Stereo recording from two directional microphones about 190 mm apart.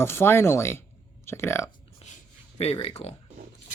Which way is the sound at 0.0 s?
10° left (ahead or behind).